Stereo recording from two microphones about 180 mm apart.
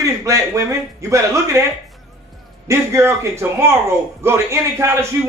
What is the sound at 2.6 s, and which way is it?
A man's voice, 15° right (ahead or behind).